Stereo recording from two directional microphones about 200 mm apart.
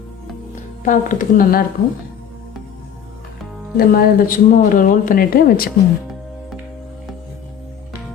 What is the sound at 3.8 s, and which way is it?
Speech, 45° left (ahead or behind).